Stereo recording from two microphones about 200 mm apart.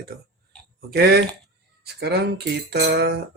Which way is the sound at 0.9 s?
50° right (ahead or behind).